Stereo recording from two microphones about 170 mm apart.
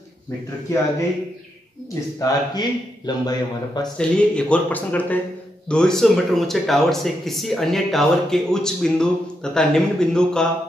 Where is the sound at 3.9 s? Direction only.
5° left (ahead or behind).